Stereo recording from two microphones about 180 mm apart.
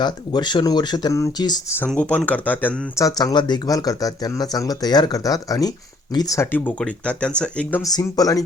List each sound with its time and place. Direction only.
0.0 s speech: 25° left (ahead or behind)
1.8 s speech: 5° left (ahead or behind)
3.2 s speech: 25° left (ahead or behind); by 7.8 s 5° left (ahead or behind)
7.9 s speech: 20° left (ahead or behind)